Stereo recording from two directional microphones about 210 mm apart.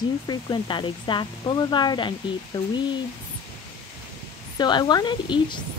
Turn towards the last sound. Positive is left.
turn(degrees=20)  # may be behind; listen again after turning